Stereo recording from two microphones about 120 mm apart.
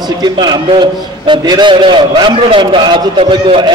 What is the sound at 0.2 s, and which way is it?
A man's voice, 40° right (ahead or behind).